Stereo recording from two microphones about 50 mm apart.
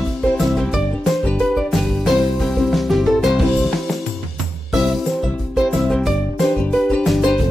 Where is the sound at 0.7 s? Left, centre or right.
Centre.